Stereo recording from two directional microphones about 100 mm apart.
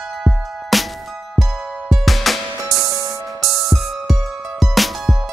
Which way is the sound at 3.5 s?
Centre (ahead or behind).